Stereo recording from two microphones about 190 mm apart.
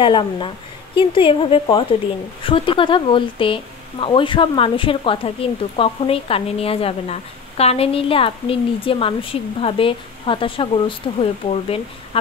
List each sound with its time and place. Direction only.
0.0 s speech: 25° left (ahead or behind)